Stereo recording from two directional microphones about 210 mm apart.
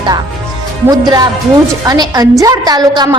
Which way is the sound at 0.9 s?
20° right (ahead or behind).